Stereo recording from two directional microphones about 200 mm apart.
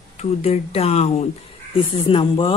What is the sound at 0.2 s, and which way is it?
A woman's voice, 30° left (ahead or behind).